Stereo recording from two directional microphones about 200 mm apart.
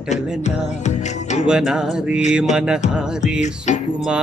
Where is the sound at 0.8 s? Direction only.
35° left (ahead or behind).